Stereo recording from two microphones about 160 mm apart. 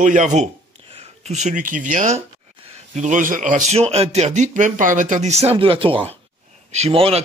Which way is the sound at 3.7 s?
40° right (ahead or behind).